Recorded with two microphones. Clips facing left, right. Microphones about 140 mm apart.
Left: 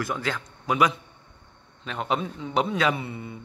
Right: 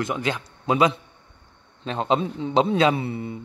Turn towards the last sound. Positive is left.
turn(degrees=-30)  # may be behind; listen again after turning